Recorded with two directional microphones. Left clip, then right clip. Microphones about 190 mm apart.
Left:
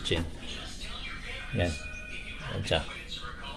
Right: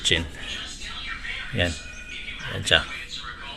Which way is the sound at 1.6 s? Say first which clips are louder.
Right 5 dB; 5° right (ahead or behind).